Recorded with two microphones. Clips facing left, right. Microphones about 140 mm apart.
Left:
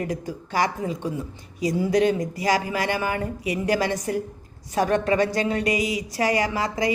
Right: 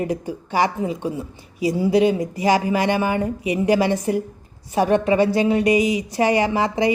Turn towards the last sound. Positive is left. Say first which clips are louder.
# right 5 dB
turn(degrees=-30)  # may be behind; listen again after turning